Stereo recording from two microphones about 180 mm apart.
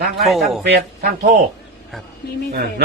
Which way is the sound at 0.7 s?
55° right (ahead or behind).